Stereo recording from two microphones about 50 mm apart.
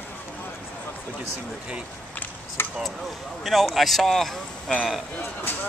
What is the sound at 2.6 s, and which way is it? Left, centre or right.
Speech, left.